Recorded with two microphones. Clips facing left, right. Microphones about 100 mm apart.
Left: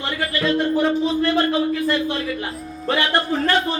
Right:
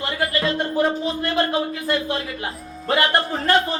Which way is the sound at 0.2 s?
30° right (ahead or behind).